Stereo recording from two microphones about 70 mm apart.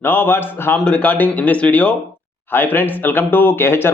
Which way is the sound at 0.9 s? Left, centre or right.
Centre.